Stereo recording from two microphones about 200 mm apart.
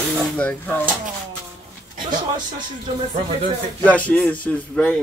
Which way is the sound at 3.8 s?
5° left (ahead or behind).